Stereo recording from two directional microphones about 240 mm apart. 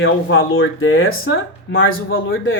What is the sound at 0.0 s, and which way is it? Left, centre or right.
Speech, left.